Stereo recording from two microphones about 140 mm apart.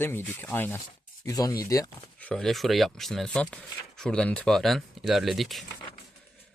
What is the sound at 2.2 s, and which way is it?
Speech, 5° left (ahead or behind).